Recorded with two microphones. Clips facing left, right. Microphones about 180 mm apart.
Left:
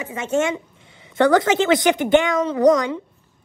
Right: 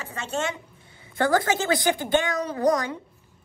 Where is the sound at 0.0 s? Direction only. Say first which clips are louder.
Left 8 dB; 15° left (ahead or behind).